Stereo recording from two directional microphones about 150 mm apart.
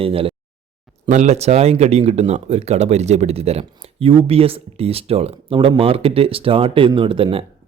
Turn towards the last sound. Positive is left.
turn(degrees=-35)  # may be behind; listen again after turning